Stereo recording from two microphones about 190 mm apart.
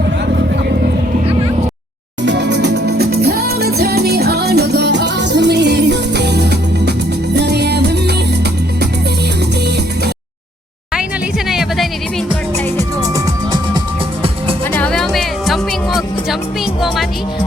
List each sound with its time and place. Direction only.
2.2 s music: 65° right (ahead or behind)
9.6 s music: 60° right (ahead or behind)
11.4 s music: centre (ahead or behind)
12.7 s music: 20° right (ahead or behind)
14.7 s music: 5° left (ahead or behind)